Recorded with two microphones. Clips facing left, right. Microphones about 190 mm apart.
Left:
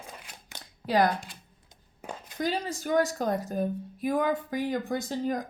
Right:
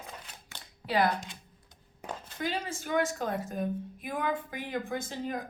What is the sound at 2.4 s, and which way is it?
A woman's voice, 40° left (ahead or behind).